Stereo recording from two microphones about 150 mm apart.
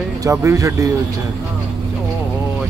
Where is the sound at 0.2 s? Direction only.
20° right (ahead or behind).